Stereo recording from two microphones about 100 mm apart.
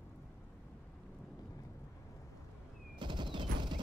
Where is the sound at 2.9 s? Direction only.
55° right (ahead or behind).